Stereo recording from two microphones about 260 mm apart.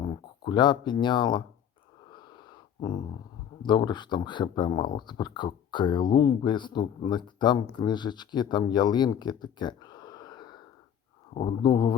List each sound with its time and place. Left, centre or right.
0.0 s speech: centre
2.0 s a sound: centre
3.6 s speech: centre